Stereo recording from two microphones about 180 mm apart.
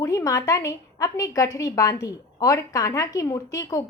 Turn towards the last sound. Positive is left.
turn(degrees=20)  # may be behind; listen again after turning